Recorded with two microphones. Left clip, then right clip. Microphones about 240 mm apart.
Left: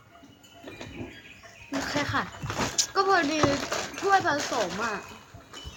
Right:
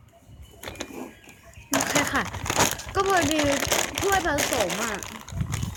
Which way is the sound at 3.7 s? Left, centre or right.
Right.